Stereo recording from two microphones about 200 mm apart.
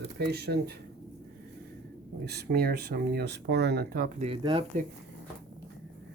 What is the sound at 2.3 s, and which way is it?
Speech, 50° right (ahead or behind).